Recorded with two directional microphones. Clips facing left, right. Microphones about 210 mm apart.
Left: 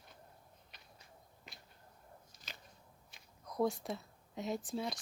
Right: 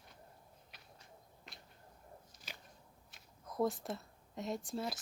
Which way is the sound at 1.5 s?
Centre (ahead or behind).